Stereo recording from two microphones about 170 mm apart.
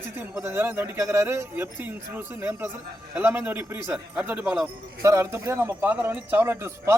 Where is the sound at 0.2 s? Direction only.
15° right (ahead or behind).